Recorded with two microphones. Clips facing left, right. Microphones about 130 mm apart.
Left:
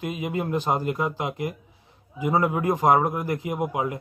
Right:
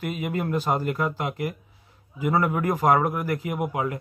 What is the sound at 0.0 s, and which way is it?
Speech, 15° left (ahead or behind).